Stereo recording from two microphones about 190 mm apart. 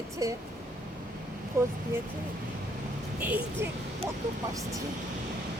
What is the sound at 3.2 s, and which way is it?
Speech, 10° right (ahead or behind).